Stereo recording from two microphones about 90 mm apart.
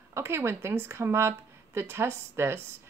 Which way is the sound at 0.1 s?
25° right (ahead or behind).